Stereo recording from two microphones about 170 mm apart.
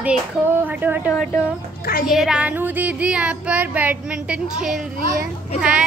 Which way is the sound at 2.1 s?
5° right (ahead or behind).